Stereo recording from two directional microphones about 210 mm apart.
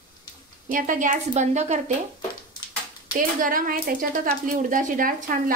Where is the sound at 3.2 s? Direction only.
40° right (ahead or behind).